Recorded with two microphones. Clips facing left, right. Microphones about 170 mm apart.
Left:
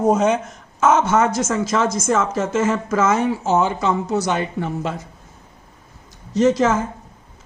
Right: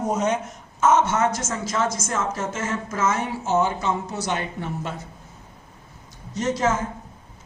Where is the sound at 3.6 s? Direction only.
90° left.